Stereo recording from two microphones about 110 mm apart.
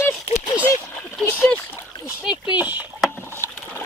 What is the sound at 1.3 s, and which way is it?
Splash, 20° left (ahead or behind).